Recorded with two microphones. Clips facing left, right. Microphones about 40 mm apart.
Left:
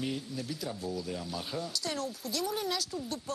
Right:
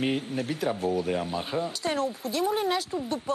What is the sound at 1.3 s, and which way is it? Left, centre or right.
Speech, right.